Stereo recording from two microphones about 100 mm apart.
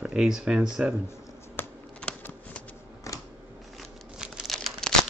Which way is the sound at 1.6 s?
20° left (ahead or behind).